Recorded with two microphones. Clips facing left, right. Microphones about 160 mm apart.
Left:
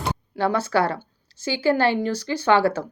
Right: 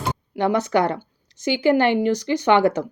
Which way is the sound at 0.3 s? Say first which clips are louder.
Right 2 dB; 20° right (ahead or behind).